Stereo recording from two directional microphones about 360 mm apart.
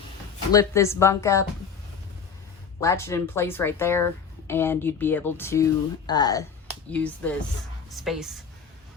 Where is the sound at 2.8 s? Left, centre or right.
Centre.